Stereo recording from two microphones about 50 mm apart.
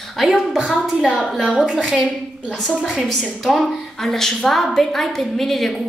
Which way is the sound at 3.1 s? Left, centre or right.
Centre.